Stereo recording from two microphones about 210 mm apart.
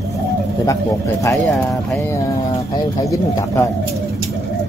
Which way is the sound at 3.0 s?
15° left (ahead or behind).